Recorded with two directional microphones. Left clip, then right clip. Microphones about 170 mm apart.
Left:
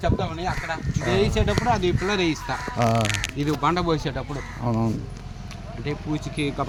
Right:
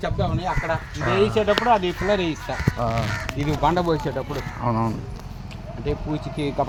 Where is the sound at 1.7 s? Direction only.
65° left (ahead or behind).